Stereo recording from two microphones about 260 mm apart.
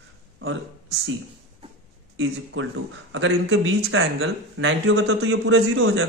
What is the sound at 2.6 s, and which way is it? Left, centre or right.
Speech, right.